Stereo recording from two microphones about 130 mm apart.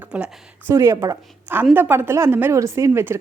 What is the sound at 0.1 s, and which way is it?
Speech, 10° right (ahead or behind).